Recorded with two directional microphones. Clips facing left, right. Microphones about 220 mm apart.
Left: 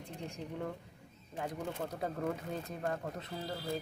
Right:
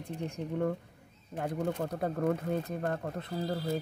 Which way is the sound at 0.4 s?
60° right (ahead or behind).